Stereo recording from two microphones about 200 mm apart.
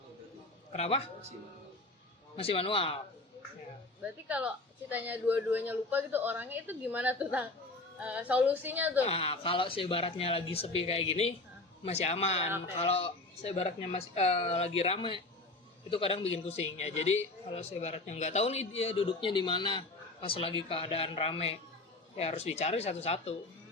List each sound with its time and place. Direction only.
0.7 s a man's voice: 30° left (ahead or behind)
2.3 s speech: 30° left (ahead or behind)
4.3 s speech: 5° right (ahead or behind)
9.0 s a man's voice: 30° left (ahead or behind)